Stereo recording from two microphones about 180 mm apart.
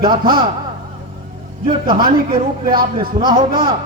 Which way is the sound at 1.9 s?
55° right (ahead or behind).